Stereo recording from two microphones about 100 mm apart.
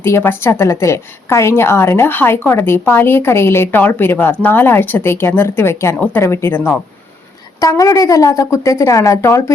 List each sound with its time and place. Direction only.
0.0 s a woman's voice: 25° left (ahead or behind)